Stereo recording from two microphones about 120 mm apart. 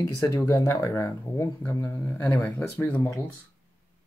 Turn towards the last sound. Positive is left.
turn(degrees=20)  # may be behind; listen again after turning